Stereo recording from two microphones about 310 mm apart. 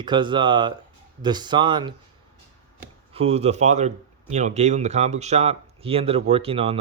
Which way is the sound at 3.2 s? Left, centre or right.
Centre.